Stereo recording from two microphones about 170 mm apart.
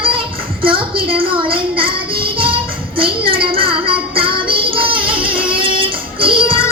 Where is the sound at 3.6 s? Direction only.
30° right (ahead or behind).